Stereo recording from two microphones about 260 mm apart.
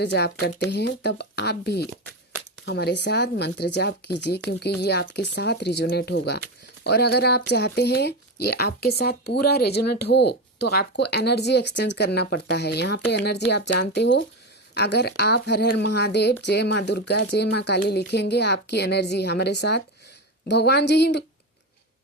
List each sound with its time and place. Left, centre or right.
0.0 s speech: left